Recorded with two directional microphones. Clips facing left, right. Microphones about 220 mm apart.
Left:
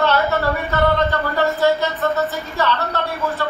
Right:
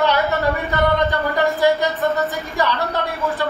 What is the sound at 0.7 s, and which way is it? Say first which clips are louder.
Speech: left 2 dB; 15° right (ahead or behind).